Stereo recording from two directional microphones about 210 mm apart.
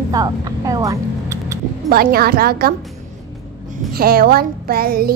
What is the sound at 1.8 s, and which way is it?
Music, 45° right (ahead or behind).